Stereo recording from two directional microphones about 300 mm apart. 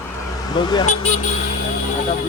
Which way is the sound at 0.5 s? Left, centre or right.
Centre.